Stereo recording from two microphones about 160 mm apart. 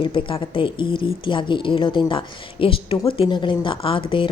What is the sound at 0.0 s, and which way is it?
A woman's voice, 30° left (ahead or behind).